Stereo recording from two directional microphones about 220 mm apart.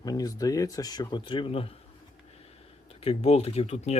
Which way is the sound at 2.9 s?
25° left (ahead or behind).